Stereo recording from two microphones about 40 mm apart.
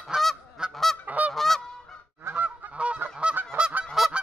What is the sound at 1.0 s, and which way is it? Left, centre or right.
Honk, right.